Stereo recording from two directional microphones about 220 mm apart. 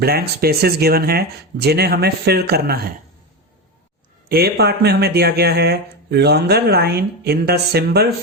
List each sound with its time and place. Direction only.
0.0 s speech: 45° right (ahead or behind)
4.3 s speech: 45° right (ahead or behind)